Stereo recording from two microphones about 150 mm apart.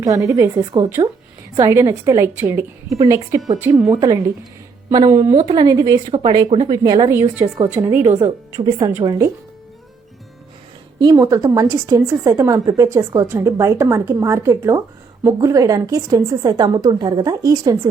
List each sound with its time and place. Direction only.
0.0 s a woman's voice: 20° right (ahead or behind)
11.0 s a woman's voice: 20° right (ahead or behind)